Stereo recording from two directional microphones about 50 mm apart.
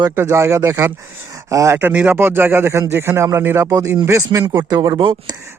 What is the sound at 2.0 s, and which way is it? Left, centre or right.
A man's voice, right.